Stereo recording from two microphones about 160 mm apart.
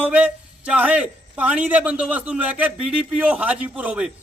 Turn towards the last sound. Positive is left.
turn(degrees=-5)  # may be behind; listen again after turning